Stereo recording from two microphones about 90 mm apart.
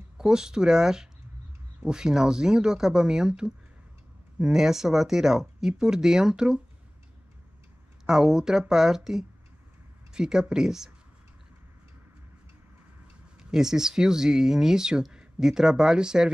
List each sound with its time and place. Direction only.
0.2 s speech: 5° right (ahead or behind)
8.1 s speech: 5° right (ahead or behind)
13.4 s speech: 5° right (ahead or behind)